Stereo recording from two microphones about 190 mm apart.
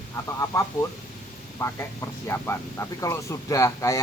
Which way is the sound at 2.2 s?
15° left (ahead or behind).